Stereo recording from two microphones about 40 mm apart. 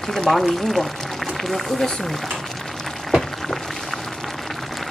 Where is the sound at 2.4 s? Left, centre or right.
Centre.